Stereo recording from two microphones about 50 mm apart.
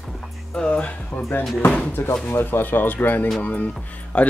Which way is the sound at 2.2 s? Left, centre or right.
Left.